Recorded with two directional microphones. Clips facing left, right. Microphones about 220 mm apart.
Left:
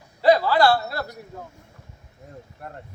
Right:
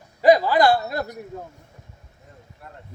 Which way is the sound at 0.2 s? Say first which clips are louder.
Right 2 dB; 15° right (ahead or behind).